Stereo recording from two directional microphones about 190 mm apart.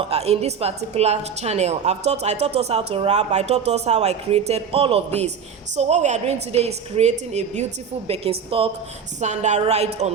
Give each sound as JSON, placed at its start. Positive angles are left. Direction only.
{"t": 0.0, "sound": "a woman's voice", "side_deg": -35}